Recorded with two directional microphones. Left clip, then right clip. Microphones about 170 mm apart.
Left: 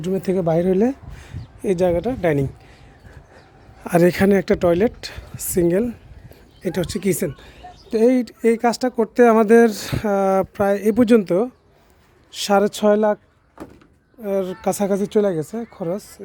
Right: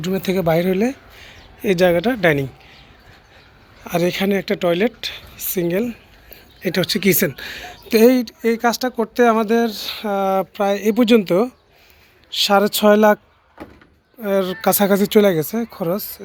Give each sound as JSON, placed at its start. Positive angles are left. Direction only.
{"t": 0.0, "sound": "speech", "side_deg": 25}
{"t": 1.6, "sound": "speech", "side_deg": 15}
{"t": 3.8, "sound": "a woman's voice", "side_deg": 60}
{"t": 6.6, "sound": "speech", "side_deg": 20}
{"t": 8.2, "sound": "speech", "side_deg": 45}
{"t": 14.2, "sound": "speech", "side_deg": 15}